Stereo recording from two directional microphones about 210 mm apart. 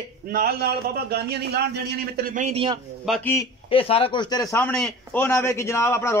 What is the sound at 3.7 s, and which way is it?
A man's voice, 25° left (ahead or behind).